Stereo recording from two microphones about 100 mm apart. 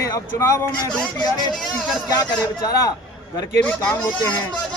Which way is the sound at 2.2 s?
40° left (ahead or behind).